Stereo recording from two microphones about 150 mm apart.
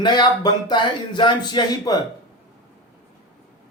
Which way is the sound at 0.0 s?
30° left (ahead or behind).